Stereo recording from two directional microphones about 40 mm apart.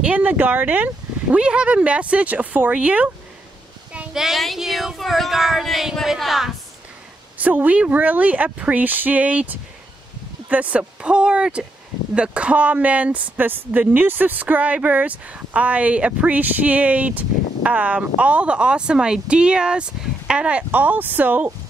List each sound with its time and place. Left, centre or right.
0.2 s speech: right
1.3 s speech: right
4.1 s speech: centre
4.6 s a sound: centre
7.3 s speech: right
10.8 s speech: right
13.4 s speech: right
20.7 s speech: right